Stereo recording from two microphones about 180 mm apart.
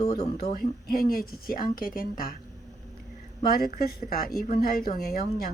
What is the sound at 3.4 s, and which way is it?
Speech, 55° left (ahead or behind).